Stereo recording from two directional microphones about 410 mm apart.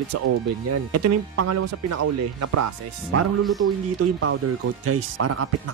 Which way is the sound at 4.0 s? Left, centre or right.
Right.